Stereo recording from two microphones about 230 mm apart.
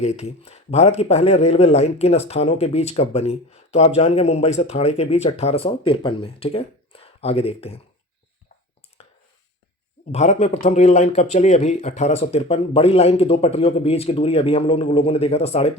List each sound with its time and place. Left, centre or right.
0.0 s speech: left
10.1 s speech: left